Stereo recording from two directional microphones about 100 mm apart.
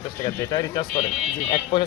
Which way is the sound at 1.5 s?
60° left (ahead or behind).